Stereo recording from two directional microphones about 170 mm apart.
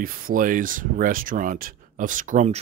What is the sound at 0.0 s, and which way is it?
Speech, 55° right (ahead or behind).